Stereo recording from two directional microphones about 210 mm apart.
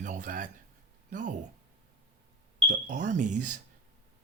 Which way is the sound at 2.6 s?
35° right (ahead or behind).